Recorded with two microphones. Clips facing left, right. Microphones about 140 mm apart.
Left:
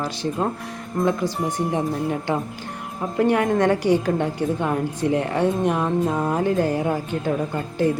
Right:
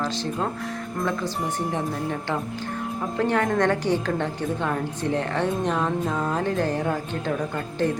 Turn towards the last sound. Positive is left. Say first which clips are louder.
# left 3 dB
turn(degrees=10)  # may be behind; listen again after turning